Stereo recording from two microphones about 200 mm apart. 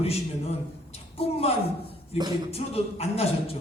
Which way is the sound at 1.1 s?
30° left (ahead or behind).